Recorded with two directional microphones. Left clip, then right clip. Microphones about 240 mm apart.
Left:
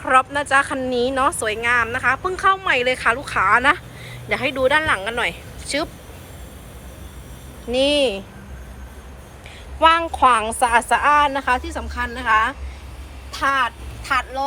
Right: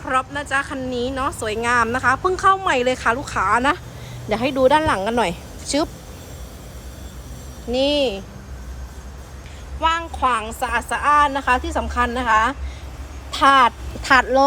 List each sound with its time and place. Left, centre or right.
0.0 s speech: centre
7.7 s speech: centre
9.8 s speech: centre; by 14.4 s right